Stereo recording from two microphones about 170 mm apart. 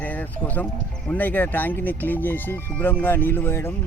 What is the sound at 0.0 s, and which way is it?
Speech, 10° left (ahead or behind).